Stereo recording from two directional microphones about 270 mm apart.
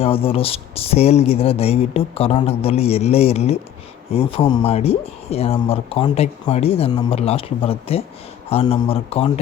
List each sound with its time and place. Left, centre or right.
0.0 s speech: left